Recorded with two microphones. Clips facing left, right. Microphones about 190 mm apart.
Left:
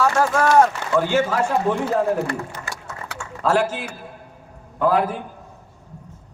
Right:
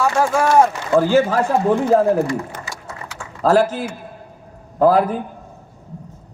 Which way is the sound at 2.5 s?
50° right (ahead or behind).